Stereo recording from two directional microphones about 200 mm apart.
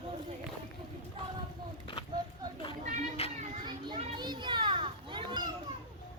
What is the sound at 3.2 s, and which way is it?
Speech, 30° left (ahead or behind).